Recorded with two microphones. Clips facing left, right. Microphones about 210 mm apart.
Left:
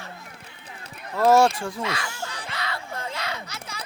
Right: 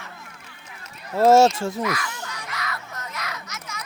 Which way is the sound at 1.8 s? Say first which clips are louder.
Right 3 dB; 25° left (ahead or behind).